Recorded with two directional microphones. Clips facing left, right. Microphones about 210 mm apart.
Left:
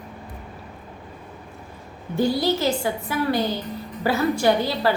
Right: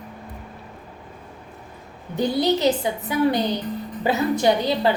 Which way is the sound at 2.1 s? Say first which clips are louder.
Right 1 dB; 20° right (ahead or behind).